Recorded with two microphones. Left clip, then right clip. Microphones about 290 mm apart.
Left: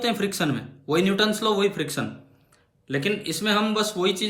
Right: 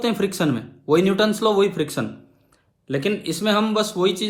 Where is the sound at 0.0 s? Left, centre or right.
Centre.